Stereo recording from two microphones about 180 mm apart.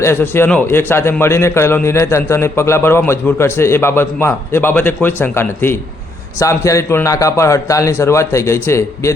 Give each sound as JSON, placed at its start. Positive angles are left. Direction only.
{"t": 0.0, "sound": "a man's voice", "side_deg": 15}